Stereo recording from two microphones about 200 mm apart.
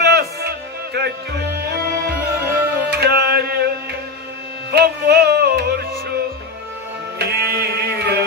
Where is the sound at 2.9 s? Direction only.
55° right (ahead or behind).